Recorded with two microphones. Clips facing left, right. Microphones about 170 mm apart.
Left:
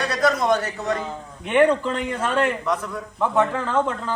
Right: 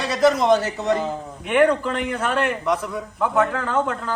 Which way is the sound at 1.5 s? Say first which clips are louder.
Even; 5° right (ahead or behind).